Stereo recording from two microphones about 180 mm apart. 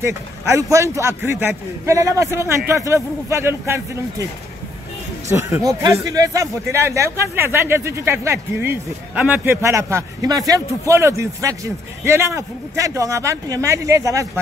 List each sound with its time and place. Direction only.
0.0 s speech: 15° right (ahead or behind)
5.3 s speech: 15° right (ahead or behind)